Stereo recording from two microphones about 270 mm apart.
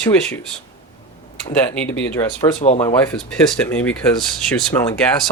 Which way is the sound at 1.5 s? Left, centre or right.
Centre.